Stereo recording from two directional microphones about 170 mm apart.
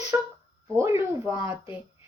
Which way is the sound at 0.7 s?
15° right (ahead or behind).